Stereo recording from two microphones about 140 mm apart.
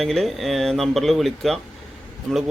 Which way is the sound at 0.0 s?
Centre (ahead or behind).